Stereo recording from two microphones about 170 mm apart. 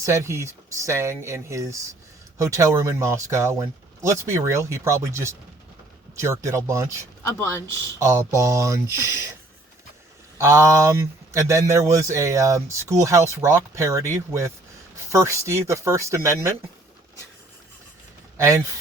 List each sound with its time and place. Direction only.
0.0 s a man's voice: 15° right (ahead or behind)
7.0 s speech: 15° left (ahead or behind)
7.9 s a man's voice: 15° right (ahead or behind)
10.3 s a man's voice: 15° right (ahead or behind)
18.3 s speech: 15° right (ahead or behind)